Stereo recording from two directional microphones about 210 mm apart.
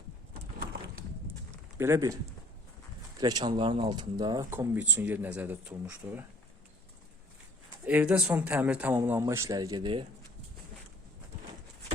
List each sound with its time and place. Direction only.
1.8 s speech: 15° right (ahead or behind)
3.2 s speech: 20° right (ahead or behind)
7.9 s speech: 5° right (ahead or behind); by 10.1 s 20° right (ahead or behind)